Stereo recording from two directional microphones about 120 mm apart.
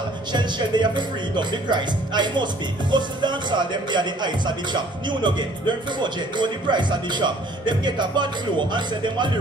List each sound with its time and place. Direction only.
0.3 s speech: 40° right (ahead or behind)